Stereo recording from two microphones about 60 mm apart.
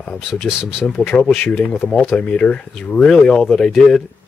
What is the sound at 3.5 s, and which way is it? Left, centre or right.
Speech, centre.